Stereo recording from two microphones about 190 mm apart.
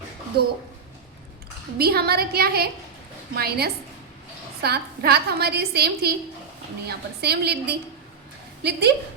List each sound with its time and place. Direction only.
1.8 s a woman's voice: 55° right (ahead or behind)